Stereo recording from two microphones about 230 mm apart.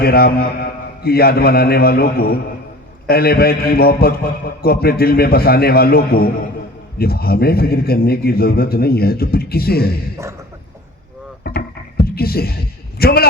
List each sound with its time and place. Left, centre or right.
0.0 s a man's voice: left
11.4 s a sound: left
13.0 s a man's voice: left